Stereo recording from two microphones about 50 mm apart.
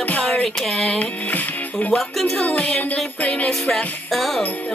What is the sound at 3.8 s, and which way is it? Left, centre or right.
Speech, left.